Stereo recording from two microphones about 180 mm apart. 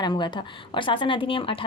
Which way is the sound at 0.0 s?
25° left (ahead or behind).